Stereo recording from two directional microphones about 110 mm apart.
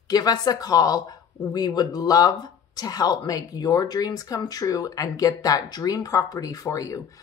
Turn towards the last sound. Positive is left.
turn(degrees=30)  # may be behind; listen again after turning